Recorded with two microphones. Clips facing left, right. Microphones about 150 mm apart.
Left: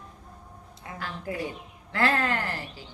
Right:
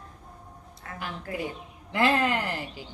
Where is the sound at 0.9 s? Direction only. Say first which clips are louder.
Left 1 dB; 20° left (ahead or behind).